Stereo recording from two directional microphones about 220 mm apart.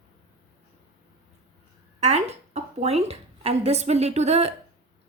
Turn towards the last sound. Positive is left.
turn(degrees=-30)  # may be behind; listen again after turning